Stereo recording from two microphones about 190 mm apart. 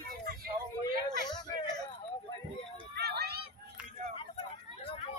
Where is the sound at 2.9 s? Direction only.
60° right (ahead or behind).